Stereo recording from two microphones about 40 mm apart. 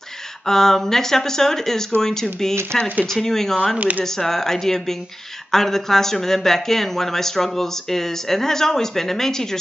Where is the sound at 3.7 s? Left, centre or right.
Right.